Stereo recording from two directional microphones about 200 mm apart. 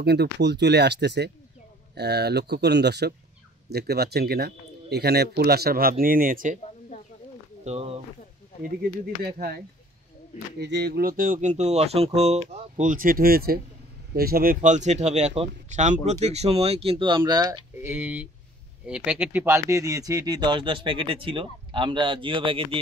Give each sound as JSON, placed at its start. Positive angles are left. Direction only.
{"t": 0.0, "sound": "speech", "side_deg": -55}
{"t": 7.6, "sound": "speech", "side_deg": -30}
{"t": 9.2, "sound": "speech", "side_deg": -50}
{"t": 10.6, "sound": "speech", "side_deg": -55}